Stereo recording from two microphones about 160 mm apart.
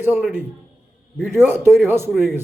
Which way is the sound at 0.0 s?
10° right (ahead or behind).